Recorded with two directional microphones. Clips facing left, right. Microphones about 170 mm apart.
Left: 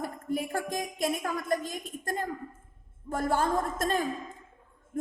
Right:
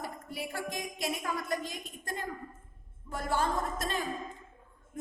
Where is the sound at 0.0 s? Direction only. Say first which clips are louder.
Left 7 dB; 50° left (ahead or behind).